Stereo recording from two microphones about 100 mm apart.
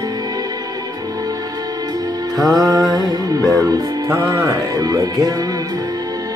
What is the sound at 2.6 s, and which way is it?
Music, 35° right (ahead or behind).